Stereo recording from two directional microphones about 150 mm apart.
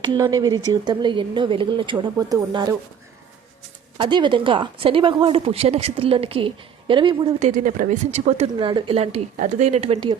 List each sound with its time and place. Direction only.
0.0 s speech: 25° right (ahead or behind)
3.9 s speech: 30° right (ahead or behind)
7.3 s speech: 55° right (ahead or behind)
8.5 s speech: 35° right (ahead or behind)
9.4 s speech: 50° right (ahead or behind)